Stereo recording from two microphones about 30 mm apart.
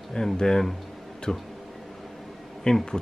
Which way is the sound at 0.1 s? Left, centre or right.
Left.